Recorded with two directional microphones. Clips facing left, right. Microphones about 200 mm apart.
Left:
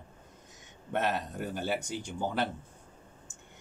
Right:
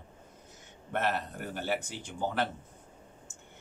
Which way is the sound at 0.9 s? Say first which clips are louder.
Left 1 dB; 15° left (ahead or behind).